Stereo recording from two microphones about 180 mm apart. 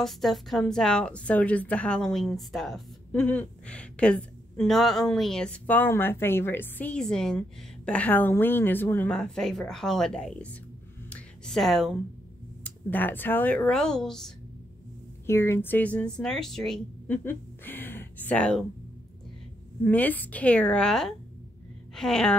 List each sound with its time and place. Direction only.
0.0 s a woman's voice: centre (ahead or behind)
11.1 s a sound: 5° left (ahead or behind)
12.6 s speech: 10° left (ahead or behind)
15.2 s speech: 15° left (ahead or behind)
19.8 s a woman's voice: 10° left (ahead or behind)